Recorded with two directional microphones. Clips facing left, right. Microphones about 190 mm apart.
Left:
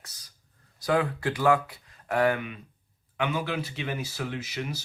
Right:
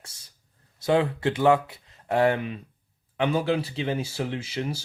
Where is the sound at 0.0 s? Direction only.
25° right (ahead or behind).